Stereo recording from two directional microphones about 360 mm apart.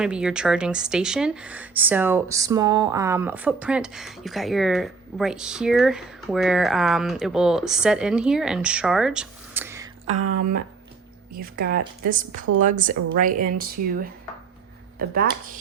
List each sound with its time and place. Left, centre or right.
0.0 s speech: centre
10.2 s speech: right
11.3 s speech: right